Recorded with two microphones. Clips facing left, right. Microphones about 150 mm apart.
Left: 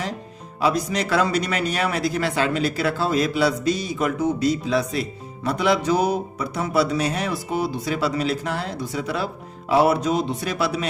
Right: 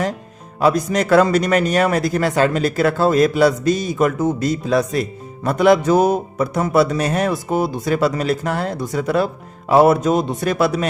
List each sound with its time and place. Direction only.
0.6 s speech: 50° right (ahead or behind)